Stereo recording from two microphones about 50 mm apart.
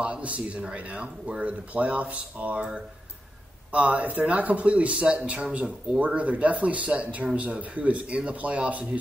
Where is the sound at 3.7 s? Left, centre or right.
Right.